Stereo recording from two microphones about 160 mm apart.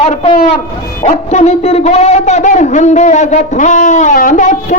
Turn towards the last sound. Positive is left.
turn(degrees=50)  # may be behind; listen again after turning